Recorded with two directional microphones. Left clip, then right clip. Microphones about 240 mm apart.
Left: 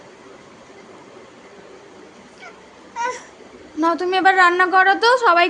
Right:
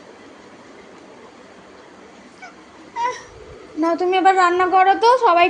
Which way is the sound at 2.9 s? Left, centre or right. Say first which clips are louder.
Right 1 dB; centre.